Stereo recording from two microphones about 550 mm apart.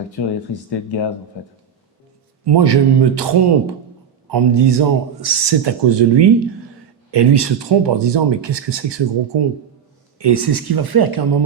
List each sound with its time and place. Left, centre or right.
0.7 s speech: left
2.4 s speech: right